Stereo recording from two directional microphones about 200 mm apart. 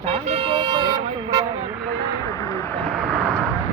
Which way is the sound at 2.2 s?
15° left (ahead or behind).